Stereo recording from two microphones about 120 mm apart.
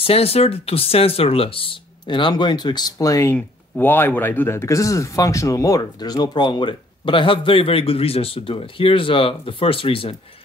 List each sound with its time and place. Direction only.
0.0 s speech: 55° left (ahead or behind); by 3.3 s 25° left (ahead or behind)
3.3 s speech: 15° left (ahead or behind); by 10.1 s 50° left (ahead or behind)